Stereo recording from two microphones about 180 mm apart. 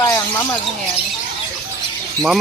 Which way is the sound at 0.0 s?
20° left (ahead or behind).